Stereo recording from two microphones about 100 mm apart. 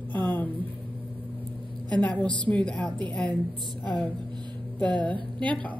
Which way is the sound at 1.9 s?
15° left (ahead or behind).